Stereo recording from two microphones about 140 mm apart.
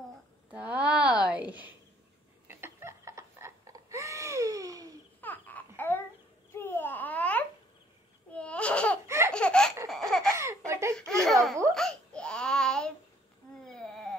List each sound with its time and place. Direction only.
0.5 s a sound: 10° right (ahead or behind)
2.4 s laughter: 15° right (ahead or behind)
5.2 s a sound: 10° left (ahead or behind)
5.8 s babbling: 15° left (ahead or behind)
9.0 s laughter: 20° right (ahead or behind)
9.3 s laughter: 5° left (ahead or behind)
10.3 s laughter: 20° right (ahead or behind)
11.0 s baby laughter: 5° left (ahead or behind)
11.7 s babbling: 5° left (ahead or behind)
13.7 s a sound: 5° left (ahead or behind)